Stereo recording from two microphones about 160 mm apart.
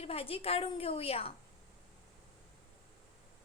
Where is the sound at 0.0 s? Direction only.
40° left (ahead or behind).